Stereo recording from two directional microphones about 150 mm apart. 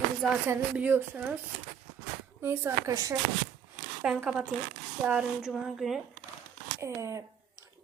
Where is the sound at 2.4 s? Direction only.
15° right (ahead or behind).